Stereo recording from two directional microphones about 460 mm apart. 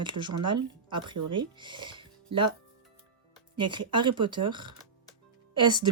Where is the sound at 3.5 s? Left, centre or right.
Centre.